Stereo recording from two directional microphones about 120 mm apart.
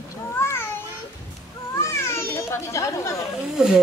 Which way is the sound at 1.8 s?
20° left (ahead or behind).